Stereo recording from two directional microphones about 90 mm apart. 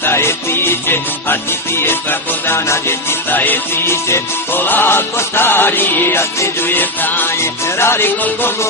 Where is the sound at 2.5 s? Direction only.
25° left (ahead or behind).